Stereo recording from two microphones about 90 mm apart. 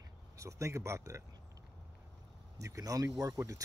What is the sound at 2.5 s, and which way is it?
Speech, 35° right (ahead or behind).